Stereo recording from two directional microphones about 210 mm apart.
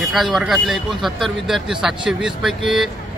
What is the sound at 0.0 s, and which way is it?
Speech, centre (ahead or behind).